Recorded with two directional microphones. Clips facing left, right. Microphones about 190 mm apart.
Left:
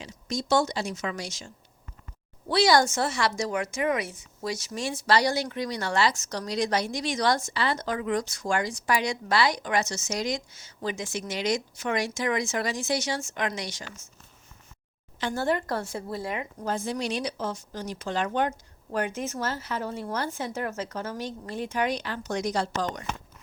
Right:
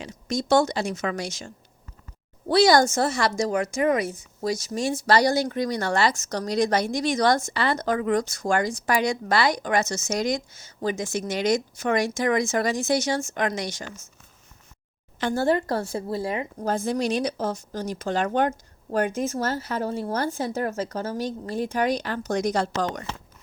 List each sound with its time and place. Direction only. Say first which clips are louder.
0.0 s a woman's voice: right 4 dB; 55° right (ahead or behind)
15.2 s a woman's voice: right 5 dB; 35° right (ahead or behind)